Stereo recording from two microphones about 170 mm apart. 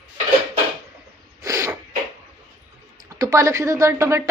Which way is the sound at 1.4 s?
20° right (ahead or behind).